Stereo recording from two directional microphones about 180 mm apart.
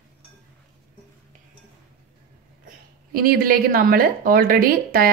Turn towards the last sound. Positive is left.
turn(degrees=-55)  # may be behind; listen again after turning